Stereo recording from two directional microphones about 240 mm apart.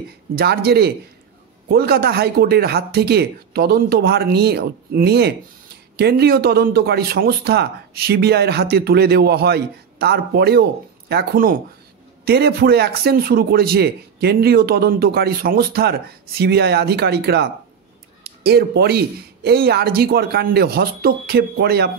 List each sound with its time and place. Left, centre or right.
0.4 s a man's voice: right